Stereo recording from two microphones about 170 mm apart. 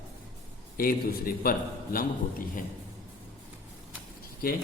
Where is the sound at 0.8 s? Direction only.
60° left (ahead or behind).